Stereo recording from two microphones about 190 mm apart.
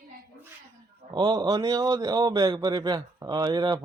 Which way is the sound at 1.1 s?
25° right (ahead or behind).